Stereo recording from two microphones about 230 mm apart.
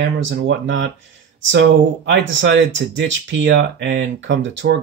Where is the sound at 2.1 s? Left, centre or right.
Right.